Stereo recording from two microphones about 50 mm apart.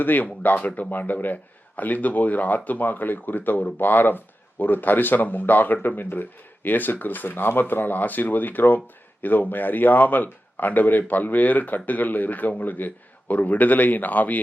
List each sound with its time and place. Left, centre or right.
0.0 s speech: left